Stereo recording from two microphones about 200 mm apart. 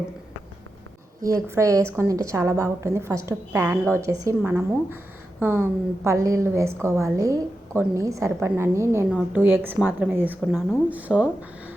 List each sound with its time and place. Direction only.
1.2 s a woman's voice: 15° right (ahead or behind)